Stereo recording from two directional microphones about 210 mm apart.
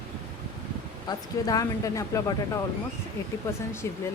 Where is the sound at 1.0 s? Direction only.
20° left (ahead or behind).